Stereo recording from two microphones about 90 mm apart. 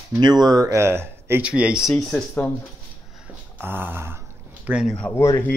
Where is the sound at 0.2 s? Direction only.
50° right (ahead or behind); by 1.4 s 30° right (ahead or behind).